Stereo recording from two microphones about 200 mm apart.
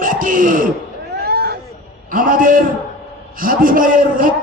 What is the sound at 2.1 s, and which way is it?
Speech, 45° right (ahead or behind).